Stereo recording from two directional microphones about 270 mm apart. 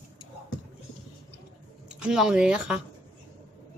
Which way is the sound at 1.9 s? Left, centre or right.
Centre.